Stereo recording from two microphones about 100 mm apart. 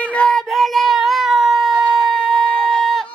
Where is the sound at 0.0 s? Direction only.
10° left (ahead or behind).